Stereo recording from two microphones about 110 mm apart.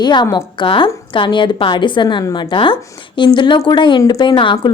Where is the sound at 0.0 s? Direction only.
45° left (ahead or behind).